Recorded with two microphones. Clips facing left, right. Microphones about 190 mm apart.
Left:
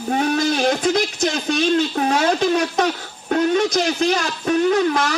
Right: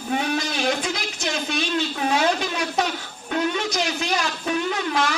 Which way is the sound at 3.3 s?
45° left (ahead or behind).